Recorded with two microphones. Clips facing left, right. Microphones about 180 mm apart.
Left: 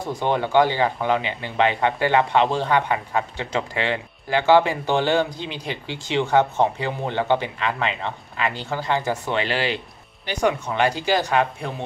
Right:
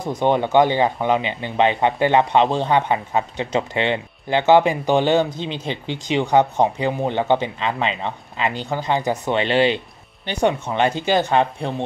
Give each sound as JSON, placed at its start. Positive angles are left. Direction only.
{"t": 0.0, "sound": "speech", "side_deg": -20}